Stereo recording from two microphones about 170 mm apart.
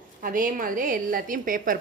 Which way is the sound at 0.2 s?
55° right (ahead or behind).